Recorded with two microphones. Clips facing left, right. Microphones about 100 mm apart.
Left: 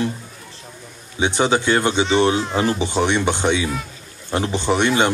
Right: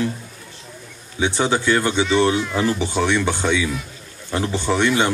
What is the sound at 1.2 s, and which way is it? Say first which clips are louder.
A man's voice: left 1 dB; 20° left (ahead or behind).